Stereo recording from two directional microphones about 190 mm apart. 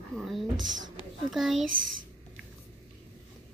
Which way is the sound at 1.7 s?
90° right.